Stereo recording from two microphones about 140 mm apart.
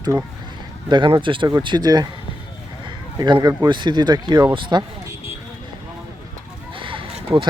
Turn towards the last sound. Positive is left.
turn(degrees=-40)  # may be behind; listen again after turning